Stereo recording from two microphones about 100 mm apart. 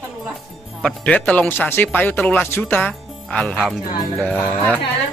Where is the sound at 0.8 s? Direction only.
10° left (ahead or behind).